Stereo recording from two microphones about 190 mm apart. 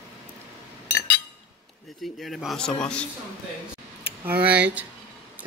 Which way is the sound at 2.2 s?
Centre (ahead or behind).